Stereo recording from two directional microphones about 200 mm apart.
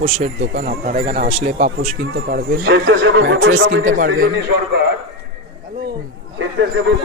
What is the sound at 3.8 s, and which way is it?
Speech, 40° right (ahead or behind).